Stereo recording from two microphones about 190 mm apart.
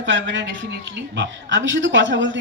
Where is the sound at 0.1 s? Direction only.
75° right (ahead or behind).